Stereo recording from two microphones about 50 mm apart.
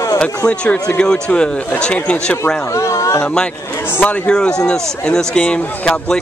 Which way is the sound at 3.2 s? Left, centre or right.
Left.